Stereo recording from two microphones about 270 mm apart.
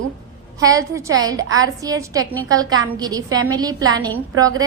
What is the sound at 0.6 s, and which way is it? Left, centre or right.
A woman's voice, centre.